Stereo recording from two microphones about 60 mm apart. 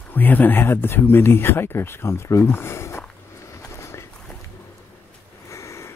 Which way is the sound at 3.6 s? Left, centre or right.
Left.